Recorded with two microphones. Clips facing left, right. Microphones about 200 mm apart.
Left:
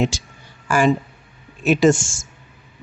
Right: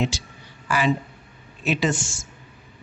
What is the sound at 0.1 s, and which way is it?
Speech, 45° left (ahead or behind).